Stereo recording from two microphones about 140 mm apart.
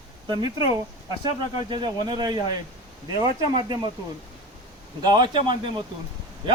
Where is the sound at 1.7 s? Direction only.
35° right (ahead or behind).